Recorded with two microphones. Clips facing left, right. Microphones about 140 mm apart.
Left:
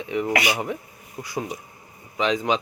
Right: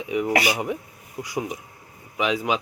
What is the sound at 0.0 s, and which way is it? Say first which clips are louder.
Dishes: right 1 dB; 15° right (ahead or behind).